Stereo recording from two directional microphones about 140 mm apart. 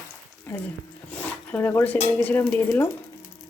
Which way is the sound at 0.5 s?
10° left (ahead or behind).